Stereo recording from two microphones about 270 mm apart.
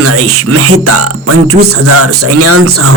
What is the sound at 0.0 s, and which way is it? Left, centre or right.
Speech, right.